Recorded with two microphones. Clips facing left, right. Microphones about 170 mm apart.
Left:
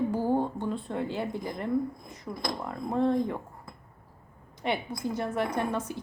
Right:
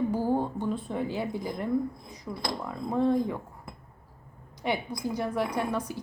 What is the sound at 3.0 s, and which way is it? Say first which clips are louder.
Speech: right 1 dB; 5° right (ahead or behind).